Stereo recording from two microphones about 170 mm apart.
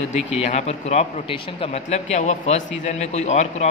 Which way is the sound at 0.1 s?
40° left (ahead or behind).